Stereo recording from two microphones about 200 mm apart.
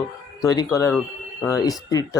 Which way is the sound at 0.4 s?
20° left (ahead or behind).